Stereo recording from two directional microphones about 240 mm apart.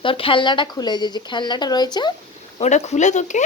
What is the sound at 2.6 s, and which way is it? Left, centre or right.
Speech, left.